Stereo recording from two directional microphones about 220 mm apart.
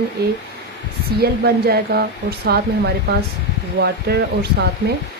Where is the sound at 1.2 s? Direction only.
45° right (ahead or behind).